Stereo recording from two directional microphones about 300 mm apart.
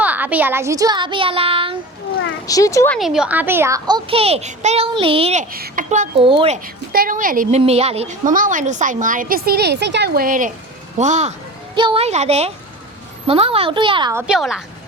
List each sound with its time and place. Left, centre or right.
0.0 s speech: centre
2.5 s speech: centre
6.9 s a woman's voice: right; by 14.6 s centre